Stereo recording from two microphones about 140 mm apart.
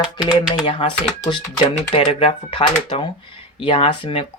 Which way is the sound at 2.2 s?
35° left (ahead or behind).